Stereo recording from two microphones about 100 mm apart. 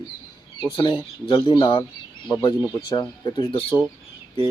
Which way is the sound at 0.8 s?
50° left (ahead or behind).